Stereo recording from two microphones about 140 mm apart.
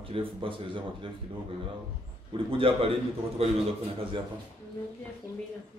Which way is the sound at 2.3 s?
40° right (ahead or behind).